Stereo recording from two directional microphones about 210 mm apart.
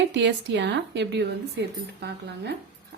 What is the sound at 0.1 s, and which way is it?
Speech, 55° right (ahead or behind).